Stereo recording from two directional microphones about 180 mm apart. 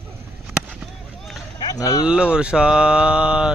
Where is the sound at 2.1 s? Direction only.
5° right (ahead or behind).